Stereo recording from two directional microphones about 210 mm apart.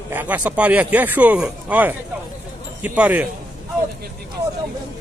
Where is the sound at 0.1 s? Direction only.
10° right (ahead or behind).